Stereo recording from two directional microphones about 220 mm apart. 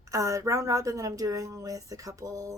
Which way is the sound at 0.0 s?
15° right (ahead or behind).